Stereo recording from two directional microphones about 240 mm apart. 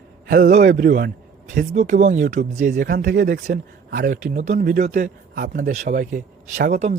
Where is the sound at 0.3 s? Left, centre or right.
Right.